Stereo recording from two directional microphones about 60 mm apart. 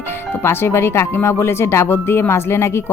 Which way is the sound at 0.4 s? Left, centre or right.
Left.